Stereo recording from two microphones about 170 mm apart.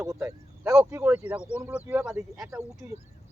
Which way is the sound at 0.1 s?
15° right (ahead or behind).